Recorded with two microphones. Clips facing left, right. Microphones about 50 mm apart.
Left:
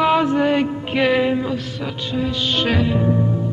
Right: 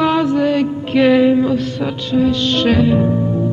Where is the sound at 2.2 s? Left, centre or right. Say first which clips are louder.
Right 6 dB; centre.